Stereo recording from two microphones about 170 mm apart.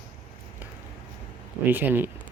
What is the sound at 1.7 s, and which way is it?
Speech, 10° right (ahead or behind).